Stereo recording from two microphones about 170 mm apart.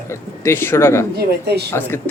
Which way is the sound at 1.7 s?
15° left (ahead or behind).